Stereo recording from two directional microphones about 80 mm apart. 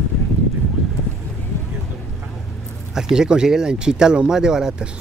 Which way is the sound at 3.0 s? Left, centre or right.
Centre.